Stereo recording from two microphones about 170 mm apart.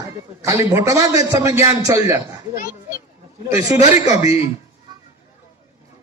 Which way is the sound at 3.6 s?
40° left (ahead or behind).